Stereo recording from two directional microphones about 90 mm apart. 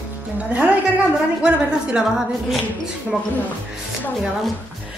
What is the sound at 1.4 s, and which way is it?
A woman's voice, 10° right (ahead or behind).